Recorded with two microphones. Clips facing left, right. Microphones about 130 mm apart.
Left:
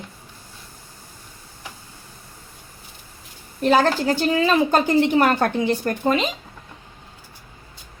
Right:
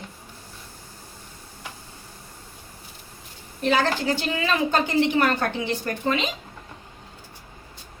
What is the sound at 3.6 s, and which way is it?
A woman's voice, 45° left (ahead or behind).